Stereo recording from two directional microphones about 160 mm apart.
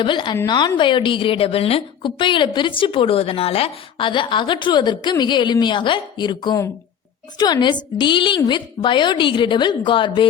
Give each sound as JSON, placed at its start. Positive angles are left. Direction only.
{"t": 0.0, "sound": "a woman's voice", "side_deg": 30}